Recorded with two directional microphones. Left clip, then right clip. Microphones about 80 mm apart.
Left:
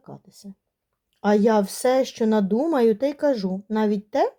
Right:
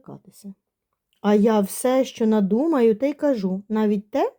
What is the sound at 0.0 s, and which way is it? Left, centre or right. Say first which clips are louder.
Speech: right 1 dB; right.